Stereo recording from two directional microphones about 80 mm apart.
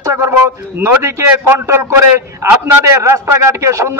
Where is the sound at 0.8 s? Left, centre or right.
Right.